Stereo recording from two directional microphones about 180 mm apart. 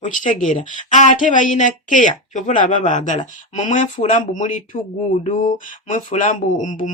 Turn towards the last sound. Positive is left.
turn(degrees=45)  # may be behind; listen again after turning